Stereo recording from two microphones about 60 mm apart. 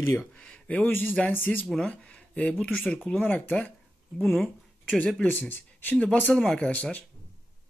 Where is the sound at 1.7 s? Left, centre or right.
Centre.